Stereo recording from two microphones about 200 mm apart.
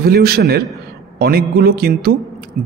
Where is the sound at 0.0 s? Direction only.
50° right (ahead or behind).